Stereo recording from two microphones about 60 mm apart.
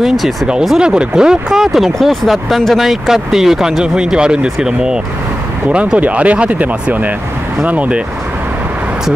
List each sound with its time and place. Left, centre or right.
0.0 s speech: centre; by 8.0 s right